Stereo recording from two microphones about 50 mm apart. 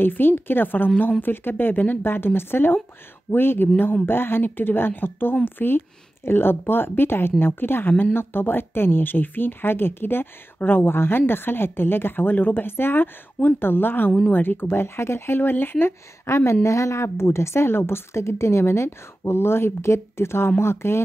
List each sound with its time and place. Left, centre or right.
0.0 s a woman's voice: left
16.3 s a woman's voice: left
16.6 s a woman's voice: left